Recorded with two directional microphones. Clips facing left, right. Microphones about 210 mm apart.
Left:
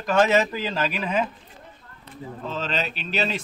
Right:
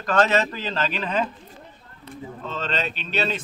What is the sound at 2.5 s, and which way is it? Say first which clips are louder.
Speech: even; 10° left (ahead or behind).